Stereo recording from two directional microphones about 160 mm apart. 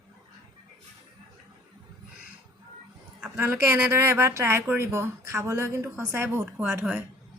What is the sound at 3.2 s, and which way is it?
Speech, 15° right (ahead or behind).